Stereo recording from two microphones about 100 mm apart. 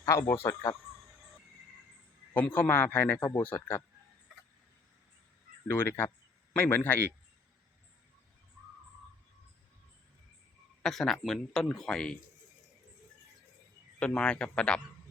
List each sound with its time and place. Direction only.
0.0 s a man's voice: 30° left (ahead or behind)
2.3 s a man's voice: 15° left (ahead or behind)
5.6 s a man's voice: 20° left (ahead or behind)
10.8 s speech: 5° left (ahead or behind)
14.0 s a man's voice: 10° left (ahead or behind)